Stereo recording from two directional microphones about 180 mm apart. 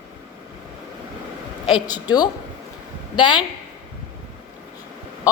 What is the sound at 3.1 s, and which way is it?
Speech, 25° left (ahead or behind).